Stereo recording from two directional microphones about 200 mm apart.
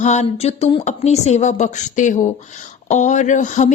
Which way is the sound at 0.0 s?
35° left (ahead or behind).